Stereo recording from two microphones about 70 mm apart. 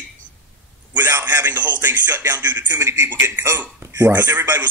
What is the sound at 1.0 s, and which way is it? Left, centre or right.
Music, right.